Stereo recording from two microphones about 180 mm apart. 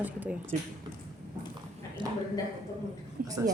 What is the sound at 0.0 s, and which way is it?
Speech, 10° right (ahead or behind).